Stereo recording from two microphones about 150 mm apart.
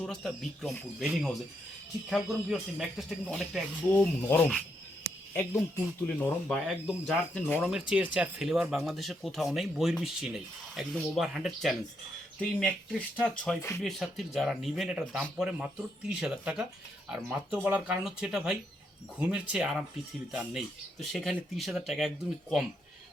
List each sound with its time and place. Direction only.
0.0 s speech: 5° left (ahead or behind)
13.6 s speech: 15° left (ahead or behind)
13.8 s speech: centre (ahead or behind)